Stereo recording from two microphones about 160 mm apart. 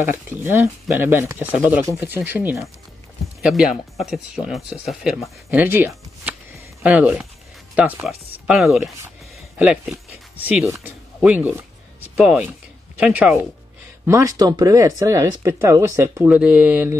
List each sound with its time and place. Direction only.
0.0 s speech: 15° right (ahead or behind)
3.4 s speech: centre (ahead or behind)
5.5 s speech: 10° right (ahead or behind)
10.7 s a sound: 10° right (ahead or behind)
13.0 s speech: 10° right (ahead or behind)
14.0 s speech: 20° right (ahead or behind)
16.3 s speech: 5° right (ahead or behind)